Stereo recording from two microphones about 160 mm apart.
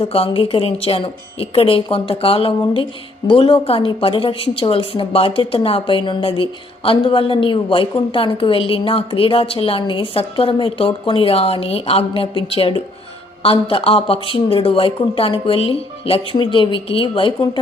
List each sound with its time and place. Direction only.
0.0 s a woman's voice: 35° left (ahead or behind)